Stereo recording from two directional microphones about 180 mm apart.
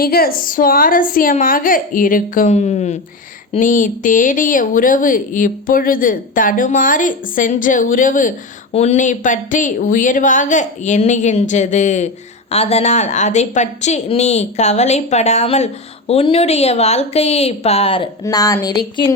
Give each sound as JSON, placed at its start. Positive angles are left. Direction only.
{"t": 0.0, "sound": "a woman's voice", "side_deg": 55}
{"t": 18.2, "sound": "a woman's voice", "side_deg": 20}